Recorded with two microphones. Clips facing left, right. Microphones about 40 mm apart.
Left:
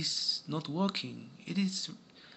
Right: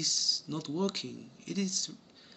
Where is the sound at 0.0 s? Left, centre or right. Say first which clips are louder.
Right 2 dB; left.